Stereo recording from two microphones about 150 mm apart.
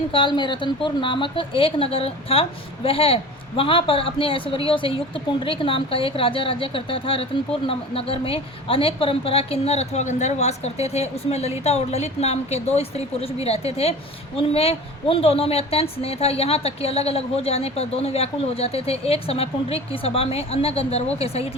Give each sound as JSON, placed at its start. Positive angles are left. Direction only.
{"t": 0.1, "sound": "a woman's voice", "side_deg": 30}